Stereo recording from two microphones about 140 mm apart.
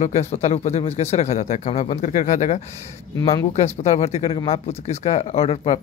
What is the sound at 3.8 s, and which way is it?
Speech, 55° left (ahead or behind).